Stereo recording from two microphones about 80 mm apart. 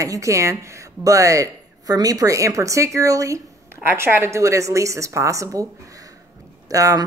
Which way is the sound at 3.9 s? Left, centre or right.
Right.